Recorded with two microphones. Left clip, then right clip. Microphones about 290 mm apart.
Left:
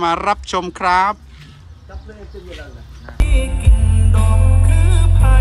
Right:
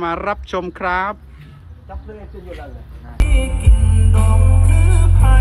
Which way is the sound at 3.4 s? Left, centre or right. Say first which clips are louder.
Even; left.